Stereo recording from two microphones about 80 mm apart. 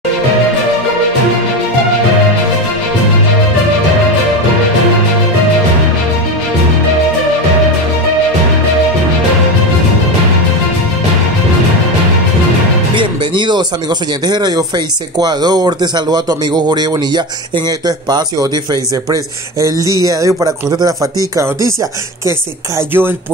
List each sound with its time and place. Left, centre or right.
12.9 s music: right
15.1 s speech: right
22.8 s speech: right